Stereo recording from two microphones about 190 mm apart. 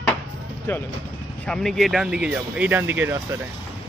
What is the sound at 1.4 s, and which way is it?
Speech, 5° left (ahead or behind).